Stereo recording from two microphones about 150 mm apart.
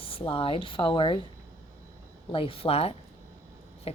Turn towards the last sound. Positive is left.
turn(degrees=40)  # may be behind; listen again after turning